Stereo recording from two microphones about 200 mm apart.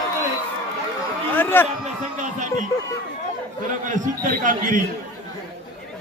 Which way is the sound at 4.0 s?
40° right (ahead or behind).